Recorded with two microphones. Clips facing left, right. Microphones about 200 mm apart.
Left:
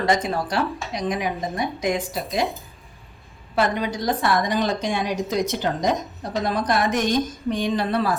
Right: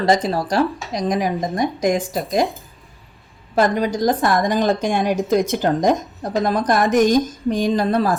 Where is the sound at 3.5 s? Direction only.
40° right (ahead or behind).